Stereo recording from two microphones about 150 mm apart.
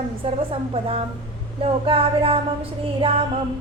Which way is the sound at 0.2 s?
40° right (ahead or behind).